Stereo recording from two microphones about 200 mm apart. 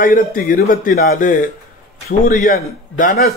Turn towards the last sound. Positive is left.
turn(degrees=45)  # may be behind; listen again after turning